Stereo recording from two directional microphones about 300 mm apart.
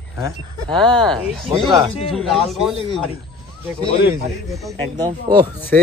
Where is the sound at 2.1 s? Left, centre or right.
Centre.